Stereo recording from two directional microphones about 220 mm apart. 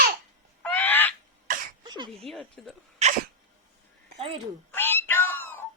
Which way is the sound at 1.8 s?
20° right (ahead or behind).